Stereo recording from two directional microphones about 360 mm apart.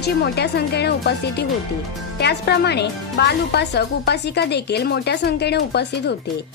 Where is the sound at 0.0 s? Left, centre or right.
Left.